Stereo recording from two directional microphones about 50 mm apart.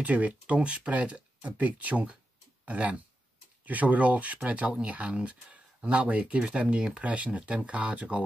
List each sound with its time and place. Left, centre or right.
0.0 s speech: right